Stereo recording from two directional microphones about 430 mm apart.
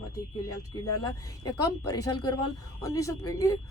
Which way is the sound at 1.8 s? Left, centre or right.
Centre.